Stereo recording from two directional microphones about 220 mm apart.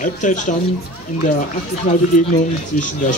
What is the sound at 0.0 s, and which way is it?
Speech, 35° left (ahead or behind).